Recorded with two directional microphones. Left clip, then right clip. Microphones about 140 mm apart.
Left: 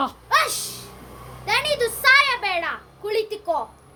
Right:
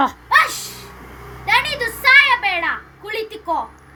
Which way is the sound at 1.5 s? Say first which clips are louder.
Right 3 dB; 50° left (ahead or behind).